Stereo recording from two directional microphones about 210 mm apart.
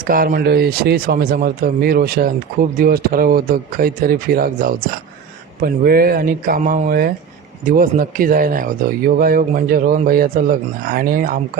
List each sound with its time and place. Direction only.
0.1 s speech: 40° right (ahead or behind)